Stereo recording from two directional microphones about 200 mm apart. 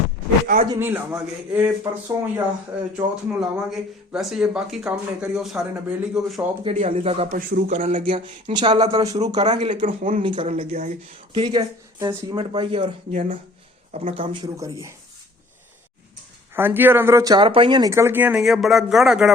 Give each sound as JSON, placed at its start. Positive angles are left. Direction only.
{"t": 0.4, "sound": "a man's voice", "side_deg": -40}
{"t": 0.7, "sound": "speech", "side_deg": -10}
{"t": 3.4, "sound": "speech", "side_deg": 0}
{"t": 6.7, "sound": "speech", "side_deg": -30}
{"t": 8.0, "sound": "speech", "side_deg": -25}
{"t": 9.8, "sound": "speech", "side_deg": -40}
{"t": 10.2, "sound": "speech", "side_deg": -30}
{"t": 11.3, "sound": "speech", "side_deg": -20}
{"t": 13.1, "sound": "speech", "side_deg": -40}
{"t": 14.4, "sound": "speech", "side_deg": -15}
{"t": 16.6, "sound": "speech", "side_deg": -10}